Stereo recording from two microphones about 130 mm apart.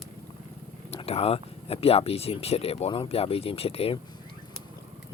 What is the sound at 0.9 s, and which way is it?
Speech, 50° left (ahead or behind).